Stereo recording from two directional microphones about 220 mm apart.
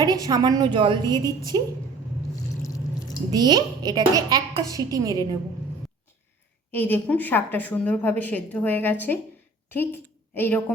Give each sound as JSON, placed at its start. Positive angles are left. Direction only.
{"t": 0.3, "sound": "a woman's voice", "side_deg": -20}
{"t": 2.6, "sound": "a sound", "side_deg": 15}
{"t": 3.3, "sound": "a child's voice", "side_deg": -20}
{"t": 6.7, "sound": "a woman's voice", "side_deg": 10}